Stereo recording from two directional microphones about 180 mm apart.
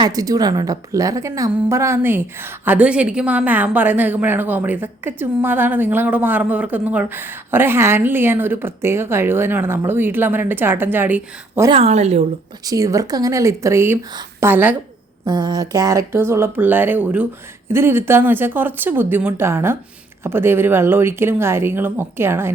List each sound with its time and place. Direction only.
0.0 s a woman's voice: 20° right (ahead or behind)
11.7 s a woman's voice: 35° right (ahead or behind)
12.6 s a woman's voice: 20° right (ahead or behind)
15.2 s a woman's voice: 25° right (ahead or behind)